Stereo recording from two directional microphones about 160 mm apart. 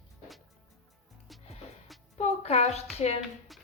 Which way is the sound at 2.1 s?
40° left (ahead or behind).